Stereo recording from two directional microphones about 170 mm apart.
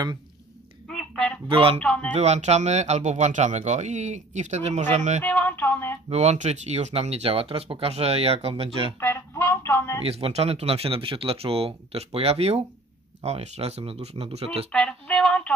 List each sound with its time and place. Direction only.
0.8 s honk: centre (ahead or behind)
1.5 s speech: 35° right (ahead or behind)
1.8 s speech: 5° left (ahead or behind)
2.1 s speech: 40° right (ahead or behind)
5.2 s speech: 10° left (ahead or behind)
6.0 s speech: 40° right (ahead or behind)
9.0 s a sound: 15° left (ahead or behind)
10.0 s speech: 35° right (ahead or behind)
14.7 s speech: 5° left (ahead or behind)